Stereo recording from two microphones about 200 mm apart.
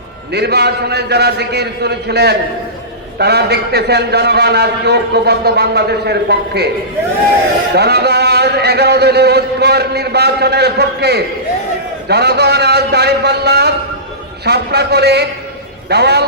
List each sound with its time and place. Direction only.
0.3 s a man's voice: 55° right (ahead or behind)
7.8 s a man's voice: 55° right (ahead or behind)